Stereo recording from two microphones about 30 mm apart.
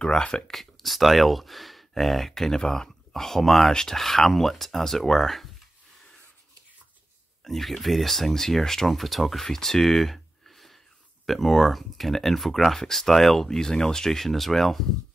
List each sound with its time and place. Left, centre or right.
0.2 s speech: left
0.5 s speech: centre
3.7 s speech: centre
4.0 s speech: centre
7.4 s speech: centre
9.5 s a sound: centre
11.2 s speech: centre